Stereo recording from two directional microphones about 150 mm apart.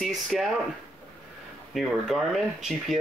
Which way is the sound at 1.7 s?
Centre (ahead or behind).